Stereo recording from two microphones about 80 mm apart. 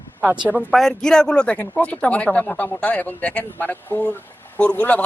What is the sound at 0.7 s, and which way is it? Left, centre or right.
A man's voice, centre.